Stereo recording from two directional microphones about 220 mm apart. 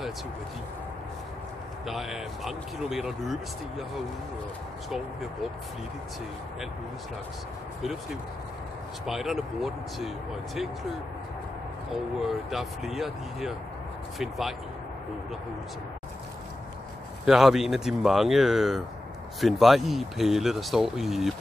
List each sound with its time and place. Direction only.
1.9 s speech: centre (ahead or behind)
9.0 s speech: centre (ahead or behind)
12.3 s speech: centre (ahead or behind)
17.3 s speech: centre (ahead or behind)